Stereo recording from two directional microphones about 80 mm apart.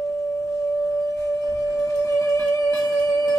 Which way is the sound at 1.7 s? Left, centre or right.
Left.